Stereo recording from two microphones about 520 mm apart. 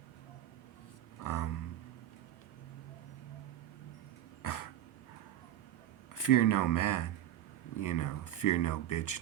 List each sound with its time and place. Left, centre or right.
1.2 s a sound: left
4.4 s dog: left
6.1 s speech: left